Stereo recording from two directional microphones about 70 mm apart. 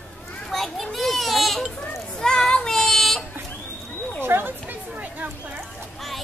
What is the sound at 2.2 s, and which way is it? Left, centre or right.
Child singing, centre.